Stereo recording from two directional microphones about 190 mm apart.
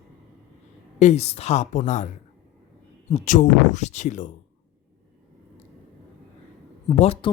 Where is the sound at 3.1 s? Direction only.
40° left (ahead or behind).